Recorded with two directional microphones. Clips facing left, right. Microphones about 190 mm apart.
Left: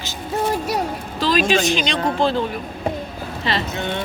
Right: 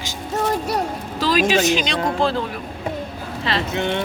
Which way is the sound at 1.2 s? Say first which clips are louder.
Even; 10° right (ahead or behind).